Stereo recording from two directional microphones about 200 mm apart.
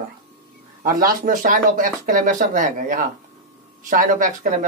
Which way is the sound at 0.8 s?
45° right (ahead or behind).